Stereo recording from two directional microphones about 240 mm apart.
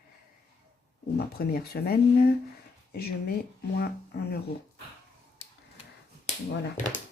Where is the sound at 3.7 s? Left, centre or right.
Left.